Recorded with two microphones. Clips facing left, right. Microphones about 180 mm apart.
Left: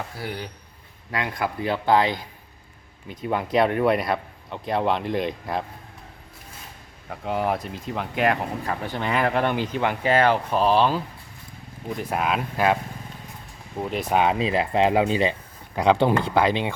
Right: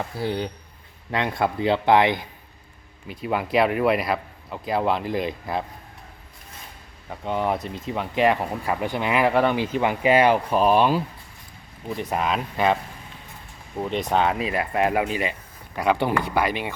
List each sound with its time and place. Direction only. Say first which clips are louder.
0.2 s speech: right 6 dB; 25° right (ahead or behind)
3.1 s a man's voice: even; 10° right (ahead or behind)
7.1 s a man's voice: even; 5° left (ahead or behind)
8.6 s speech: right 3 dB; 10° right (ahead or behind)
11.9 s a man's voice: even; centre (ahead or behind)
14.3 s speech: left 2 dB; 25° left (ahead or behind)